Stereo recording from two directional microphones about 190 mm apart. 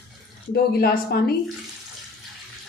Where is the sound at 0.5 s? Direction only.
55° left (ahead or behind).